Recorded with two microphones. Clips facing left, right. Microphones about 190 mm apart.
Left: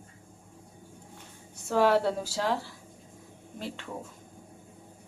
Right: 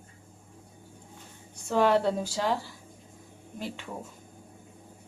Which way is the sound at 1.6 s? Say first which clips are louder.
Even; 5° left (ahead or behind).